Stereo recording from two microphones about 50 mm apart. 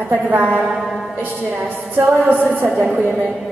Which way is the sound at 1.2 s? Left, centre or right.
Right.